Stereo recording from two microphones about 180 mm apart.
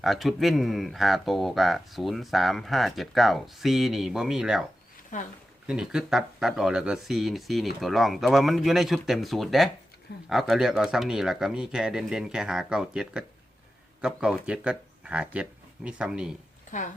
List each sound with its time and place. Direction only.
0.0 s speech: centre (ahead or behind)
5.1 s speech: 45° left (ahead or behind)
5.6 s speech: 5° right (ahead or behind)
16.7 s speech: 45° left (ahead or behind)